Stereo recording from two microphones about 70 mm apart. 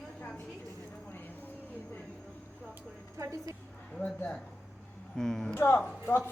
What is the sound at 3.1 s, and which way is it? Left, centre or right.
Speech, right.